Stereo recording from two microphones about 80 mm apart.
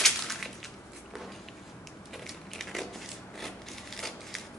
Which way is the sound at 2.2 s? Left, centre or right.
Centre.